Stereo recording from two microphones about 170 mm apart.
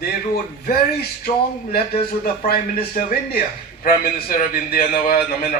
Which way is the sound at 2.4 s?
60° left (ahead or behind).